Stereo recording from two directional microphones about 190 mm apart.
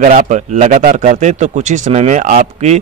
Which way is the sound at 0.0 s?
40° right (ahead or behind).